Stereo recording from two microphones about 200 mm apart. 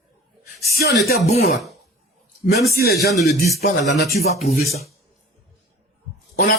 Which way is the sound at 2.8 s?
55° left (ahead or behind).